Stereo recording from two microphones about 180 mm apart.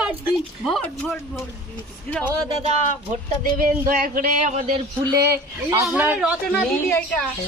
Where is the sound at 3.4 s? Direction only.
50° right (ahead or behind).